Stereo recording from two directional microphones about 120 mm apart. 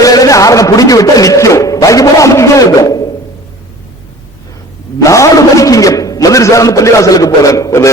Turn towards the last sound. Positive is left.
turn(degrees=25)  # may be behind; listen again after turning